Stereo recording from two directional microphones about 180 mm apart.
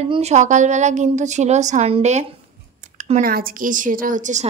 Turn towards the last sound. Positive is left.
turn(degrees=-40)  # may be behind; listen again after turning